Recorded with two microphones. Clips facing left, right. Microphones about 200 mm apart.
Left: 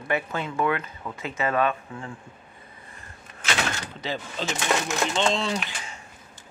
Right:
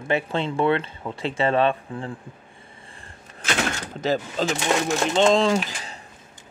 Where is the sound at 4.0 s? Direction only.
45° right (ahead or behind).